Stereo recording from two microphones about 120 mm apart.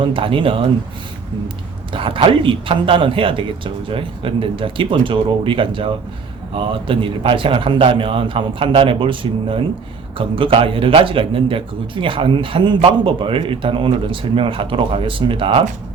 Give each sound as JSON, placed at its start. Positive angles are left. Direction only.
{"t": 0.0, "sound": "a man's voice", "side_deg": -45}
{"t": 1.9, "sound": "a man's voice", "side_deg": -45}